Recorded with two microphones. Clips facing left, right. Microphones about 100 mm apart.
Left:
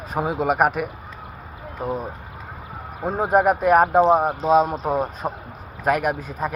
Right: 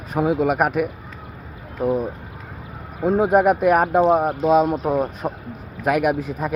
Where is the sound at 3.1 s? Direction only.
5° right (ahead or behind).